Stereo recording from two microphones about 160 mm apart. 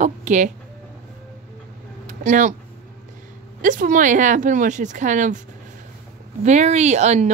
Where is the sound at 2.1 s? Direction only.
50° right (ahead or behind).